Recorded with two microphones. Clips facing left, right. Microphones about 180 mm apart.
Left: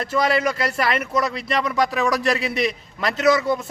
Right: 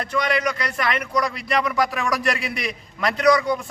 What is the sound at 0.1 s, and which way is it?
A man's voice, 25° left (ahead or behind).